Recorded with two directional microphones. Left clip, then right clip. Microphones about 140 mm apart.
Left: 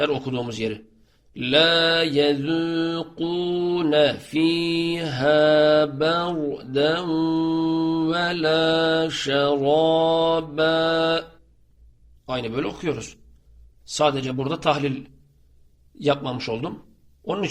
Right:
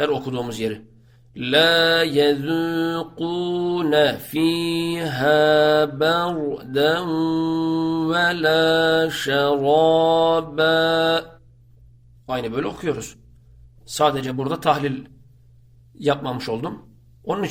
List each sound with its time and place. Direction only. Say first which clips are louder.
0.0 s a man's voice: right 1 dB; 15° left (ahead or behind)
1.3 s mantra: right 1 dB; 20° left (ahead or behind)
16.0 s a man's voice: right 1 dB; 20° left (ahead or behind)